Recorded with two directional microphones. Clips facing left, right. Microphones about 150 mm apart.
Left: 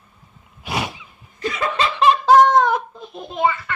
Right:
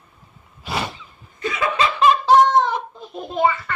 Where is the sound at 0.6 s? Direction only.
Centre (ahead or behind).